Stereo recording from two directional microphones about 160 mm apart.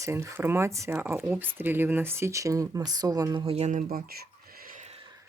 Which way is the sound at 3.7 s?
60° right (ahead or behind).